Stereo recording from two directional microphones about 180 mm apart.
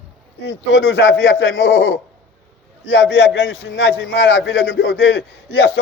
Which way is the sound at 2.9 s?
85° left.